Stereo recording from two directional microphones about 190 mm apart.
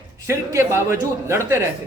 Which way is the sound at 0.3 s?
15° right (ahead or behind).